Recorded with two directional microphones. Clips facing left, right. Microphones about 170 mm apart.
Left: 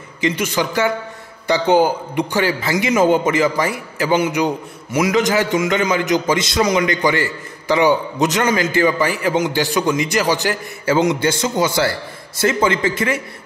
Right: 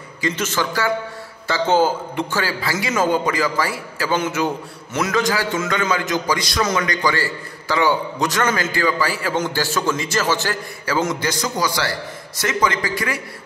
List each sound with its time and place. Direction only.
0.2 s a man's voice: 15° left (ahead or behind)